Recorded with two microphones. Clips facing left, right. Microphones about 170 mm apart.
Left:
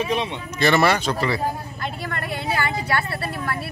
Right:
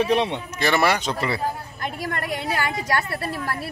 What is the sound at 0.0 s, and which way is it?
Speech, 65° right (ahead or behind).